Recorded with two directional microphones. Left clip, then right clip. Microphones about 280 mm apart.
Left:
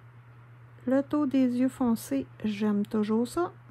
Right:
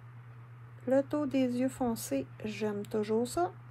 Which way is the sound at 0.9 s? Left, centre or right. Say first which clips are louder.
Left 2 dB; left.